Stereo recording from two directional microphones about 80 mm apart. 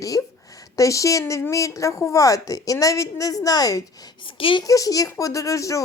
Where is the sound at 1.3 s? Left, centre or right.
Left.